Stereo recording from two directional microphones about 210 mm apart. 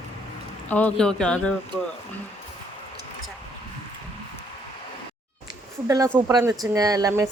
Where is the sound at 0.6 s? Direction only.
5° left (ahead or behind).